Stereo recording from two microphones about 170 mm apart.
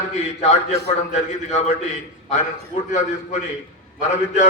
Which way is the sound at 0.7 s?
40° left (ahead or behind).